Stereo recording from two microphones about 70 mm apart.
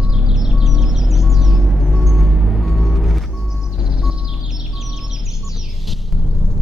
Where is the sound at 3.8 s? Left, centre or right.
Centre.